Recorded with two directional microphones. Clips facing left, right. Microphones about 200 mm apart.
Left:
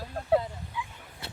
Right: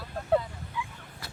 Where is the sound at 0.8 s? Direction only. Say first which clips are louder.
Right 1 dB; 15° left (ahead or behind).